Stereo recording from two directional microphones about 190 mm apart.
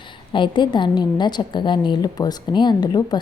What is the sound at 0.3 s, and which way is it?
A woman's voice, 25° left (ahead or behind).